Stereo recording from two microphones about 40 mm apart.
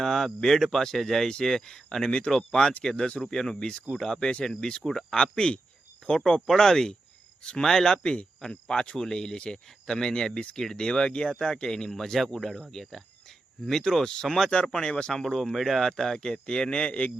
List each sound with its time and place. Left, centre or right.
0.0 s a sound: centre
0.4 s speech: centre
4.2 s a man's voice: left
4.4 s a man's voice: centre
8.0 s speech: left
15.1 s speech: centre
15.9 s a man's voice: centre